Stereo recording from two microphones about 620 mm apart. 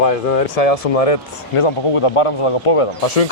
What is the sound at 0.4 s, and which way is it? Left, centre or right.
Speech, left.